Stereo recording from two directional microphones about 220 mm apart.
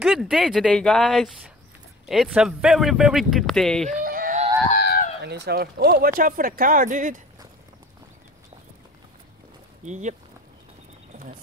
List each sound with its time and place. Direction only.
0.0 s speech: centre (ahead or behind)
3.9 s a sound: 40° right (ahead or behind)
5.2 s speech: 50° right (ahead or behind)
9.8 s speech: 35° right (ahead or behind)